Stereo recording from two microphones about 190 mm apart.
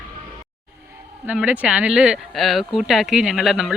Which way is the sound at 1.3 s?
5° right (ahead or behind).